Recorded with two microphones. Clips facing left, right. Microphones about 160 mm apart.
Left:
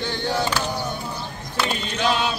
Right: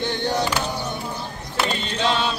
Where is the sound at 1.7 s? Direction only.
30° right (ahead or behind).